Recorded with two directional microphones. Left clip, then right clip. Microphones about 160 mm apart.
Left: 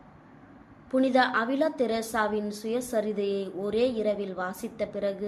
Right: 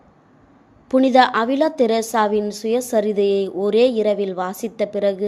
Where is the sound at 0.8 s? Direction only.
50° right (ahead or behind).